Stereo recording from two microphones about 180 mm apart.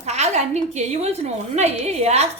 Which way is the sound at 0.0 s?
40° right (ahead or behind).